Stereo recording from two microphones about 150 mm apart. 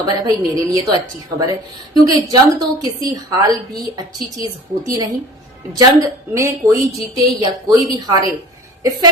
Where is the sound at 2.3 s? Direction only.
25° right (ahead or behind).